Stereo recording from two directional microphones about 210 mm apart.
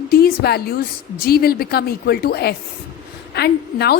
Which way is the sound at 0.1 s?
45° left (ahead or behind).